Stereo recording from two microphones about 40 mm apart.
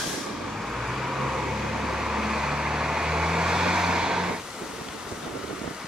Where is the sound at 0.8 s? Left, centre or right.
Centre.